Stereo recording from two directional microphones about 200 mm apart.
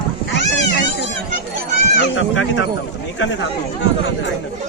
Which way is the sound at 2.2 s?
75° left (ahead or behind).